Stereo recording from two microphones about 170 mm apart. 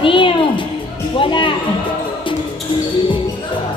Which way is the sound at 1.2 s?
30° left (ahead or behind).